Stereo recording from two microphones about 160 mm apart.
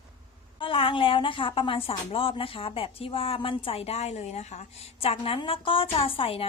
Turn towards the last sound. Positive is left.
turn(degrees=35)  # may be behind; listen again after turning